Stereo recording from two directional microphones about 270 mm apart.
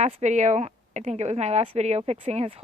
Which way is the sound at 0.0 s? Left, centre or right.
Right.